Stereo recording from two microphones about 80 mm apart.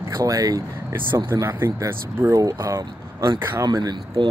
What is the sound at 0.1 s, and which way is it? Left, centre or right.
Speech, right.